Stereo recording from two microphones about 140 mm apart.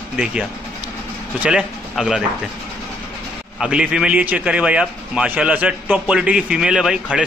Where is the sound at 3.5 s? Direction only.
5° right (ahead or behind).